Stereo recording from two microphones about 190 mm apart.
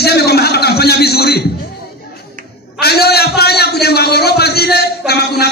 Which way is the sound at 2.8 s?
55° left (ahead or behind).